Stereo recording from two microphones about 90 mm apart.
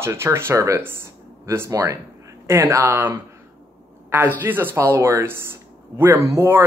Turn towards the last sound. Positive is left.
turn(degrees=-25)  # may be behind; listen again after turning